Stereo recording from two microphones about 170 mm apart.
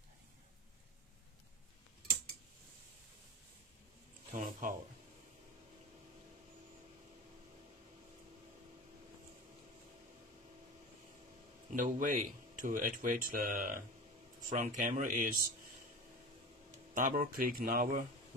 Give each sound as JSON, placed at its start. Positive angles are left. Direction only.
{"t": 4.3, "sound": "speech", "side_deg": -50}
{"t": 11.7, "sound": "speech", "side_deg": -50}
{"t": 14.5, "sound": "speech", "side_deg": -45}
{"t": 16.9, "sound": "speech", "side_deg": -50}